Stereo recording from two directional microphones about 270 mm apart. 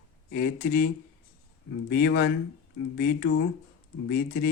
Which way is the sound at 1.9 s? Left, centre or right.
Left.